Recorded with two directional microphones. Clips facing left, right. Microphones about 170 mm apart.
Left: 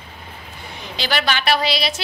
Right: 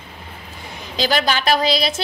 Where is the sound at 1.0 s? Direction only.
40° right (ahead or behind).